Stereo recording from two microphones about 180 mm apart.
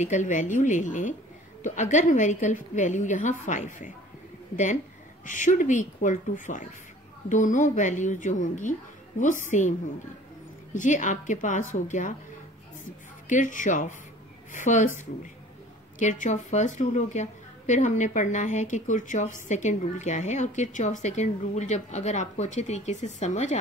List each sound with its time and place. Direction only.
0.0 s a woman's voice: 45° left (ahead or behind)
5.2 s a woman's voice: 45° left (ahead or behind)
13.3 s a woman's voice: 45° left (ahead or behind)
16.0 s a woman's voice: 45° left (ahead or behind)